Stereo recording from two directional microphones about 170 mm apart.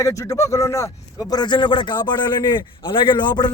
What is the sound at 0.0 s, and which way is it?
Speech, 20° left (ahead or behind).